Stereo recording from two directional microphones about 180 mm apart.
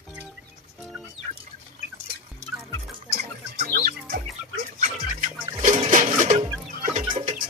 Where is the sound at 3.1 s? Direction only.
65° right (ahead or behind).